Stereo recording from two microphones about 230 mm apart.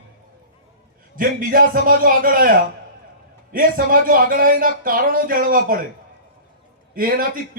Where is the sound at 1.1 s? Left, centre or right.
Right.